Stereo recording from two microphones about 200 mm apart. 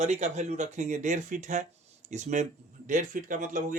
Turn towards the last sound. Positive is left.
turn(degrees=-40)  # may be behind; listen again after turning